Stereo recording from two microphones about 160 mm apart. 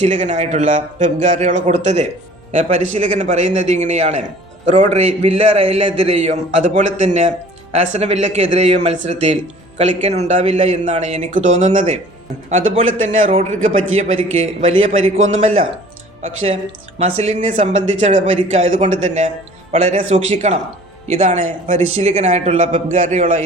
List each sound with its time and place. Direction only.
0.0 s speech: 50° right (ahead or behind)
5.5 s speech: 40° right (ahead or behind); by 14.1 s 55° right (ahead or behind)
14.2 s a man's voice: 40° right (ahead or behind)